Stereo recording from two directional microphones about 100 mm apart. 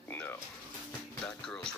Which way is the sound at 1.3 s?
5° left (ahead or behind).